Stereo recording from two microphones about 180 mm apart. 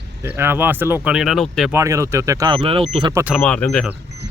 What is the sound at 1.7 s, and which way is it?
Speech, 15° right (ahead or behind).